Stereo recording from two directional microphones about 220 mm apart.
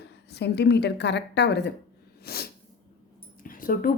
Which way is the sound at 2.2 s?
45° left (ahead or behind).